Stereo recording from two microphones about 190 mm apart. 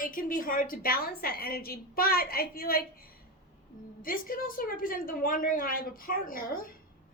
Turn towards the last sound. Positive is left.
turn(degrees=50)  # may be behind; listen again after turning